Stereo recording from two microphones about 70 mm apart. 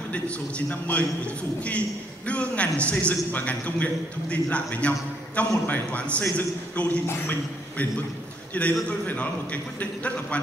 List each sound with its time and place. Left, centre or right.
0.1 s a man's voice: centre
8.5 s a man's voice: centre